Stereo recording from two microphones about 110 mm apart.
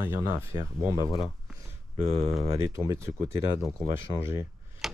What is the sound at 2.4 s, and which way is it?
Speech, 25° right (ahead or behind).